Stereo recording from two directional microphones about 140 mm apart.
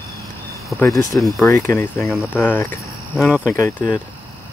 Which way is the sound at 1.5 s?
20° left (ahead or behind).